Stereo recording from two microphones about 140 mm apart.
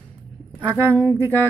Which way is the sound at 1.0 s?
15° right (ahead or behind).